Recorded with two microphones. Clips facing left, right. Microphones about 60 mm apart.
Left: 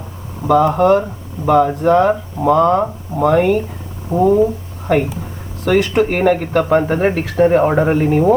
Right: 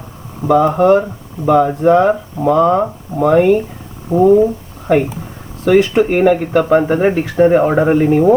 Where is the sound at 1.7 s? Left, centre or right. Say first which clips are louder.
Right 2 dB; centre.